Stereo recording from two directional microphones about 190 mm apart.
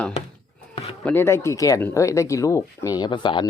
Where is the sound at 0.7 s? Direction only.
30° left (ahead or behind).